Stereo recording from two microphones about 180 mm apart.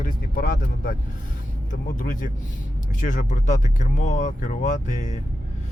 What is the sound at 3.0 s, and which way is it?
Speech, 45° left (ahead or behind).